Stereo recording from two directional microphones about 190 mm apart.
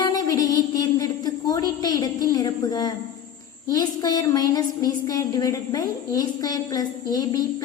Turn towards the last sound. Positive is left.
turn(degrees=20)  # may be behind; listen again after turning